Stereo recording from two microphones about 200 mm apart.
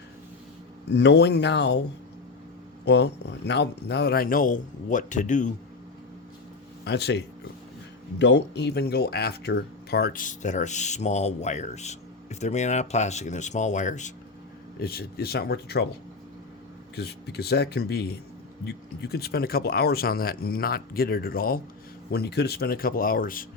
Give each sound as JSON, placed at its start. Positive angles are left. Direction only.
{"t": 0.9, "sound": "speech", "side_deg": 60}
{"t": 2.8, "sound": "speech", "side_deg": 60}
{"t": 6.8, "sound": "speech", "side_deg": 55}
{"t": 8.2, "sound": "speech", "side_deg": 60}
{"t": 14.8, "sound": "speech", "side_deg": 50}
{"t": 16.9, "sound": "speech", "side_deg": 55}